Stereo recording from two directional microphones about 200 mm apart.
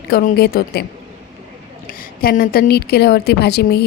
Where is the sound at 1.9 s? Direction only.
45° left (ahead or behind).